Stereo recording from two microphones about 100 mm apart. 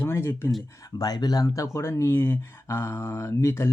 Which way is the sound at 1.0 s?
40° left (ahead or behind).